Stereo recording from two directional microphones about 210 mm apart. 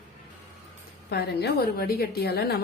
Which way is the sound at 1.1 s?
50° left (ahead or behind).